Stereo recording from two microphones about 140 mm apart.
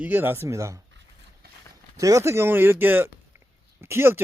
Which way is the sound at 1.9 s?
25° right (ahead or behind).